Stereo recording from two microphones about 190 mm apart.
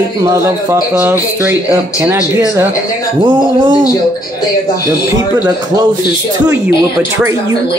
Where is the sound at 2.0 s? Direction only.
10° right (ahead or behind).